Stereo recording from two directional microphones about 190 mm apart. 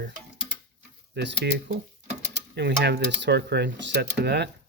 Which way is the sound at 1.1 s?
65° right (ahead or behind).